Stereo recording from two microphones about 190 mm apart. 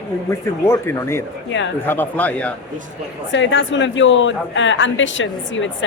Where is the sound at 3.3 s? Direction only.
70° left (ahead or behind).